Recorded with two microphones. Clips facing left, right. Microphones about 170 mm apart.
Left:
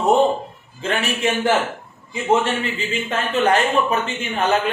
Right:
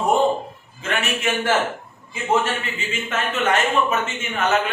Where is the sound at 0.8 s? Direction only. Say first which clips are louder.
Left 3 dB; 30° left (ahead or behind).